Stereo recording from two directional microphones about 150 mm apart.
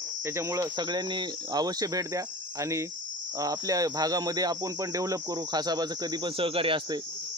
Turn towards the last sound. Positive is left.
turn(degrees=-35)  # may be behind; listen again after turning